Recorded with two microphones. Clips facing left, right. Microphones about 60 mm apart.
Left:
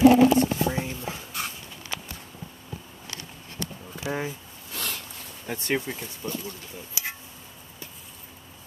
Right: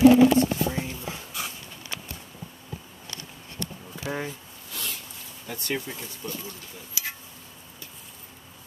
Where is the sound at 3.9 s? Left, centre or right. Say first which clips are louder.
Left 2 dB; centre.